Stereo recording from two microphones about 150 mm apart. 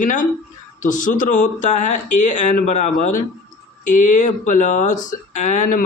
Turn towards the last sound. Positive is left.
turn(degrees=55)  # may be behind; listen again after turning